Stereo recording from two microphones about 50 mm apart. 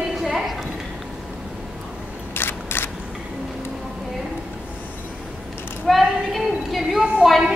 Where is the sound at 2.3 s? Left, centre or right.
Left.